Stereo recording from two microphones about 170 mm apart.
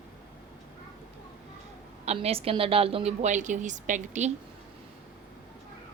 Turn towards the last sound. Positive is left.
turn(degrees=-45)  # may be behind; listen again after turning